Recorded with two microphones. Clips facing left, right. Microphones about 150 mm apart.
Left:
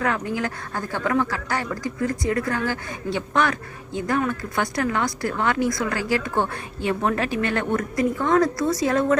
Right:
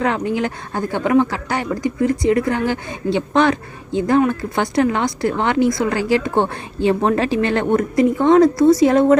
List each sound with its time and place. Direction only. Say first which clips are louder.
0.0 s speech: right 5 dB; 25° right (ahead or behind)